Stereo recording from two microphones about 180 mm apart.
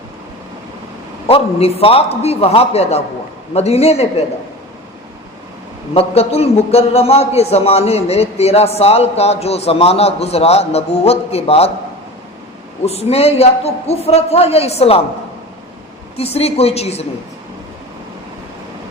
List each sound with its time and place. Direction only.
1.3 s a man's voice: 35° left (ahead or behind)
5.9 s a man's voice: 35° left (ahead or behind)
12.8 s a man's voice: 35° left (ahead or behind)
16.1 s a man's voice: 35° left (ahead or behind)